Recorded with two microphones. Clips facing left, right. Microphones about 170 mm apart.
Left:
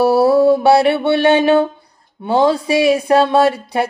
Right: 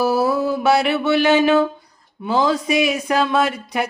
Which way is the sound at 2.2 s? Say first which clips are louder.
Left 4 dB; 30° left (ahead or behind).